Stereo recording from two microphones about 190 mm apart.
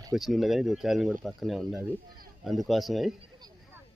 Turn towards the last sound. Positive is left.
turn(degrees=0)  # may be behind; listen again after turning